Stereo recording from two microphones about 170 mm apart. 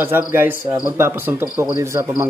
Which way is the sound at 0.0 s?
10° right (ahead or behind).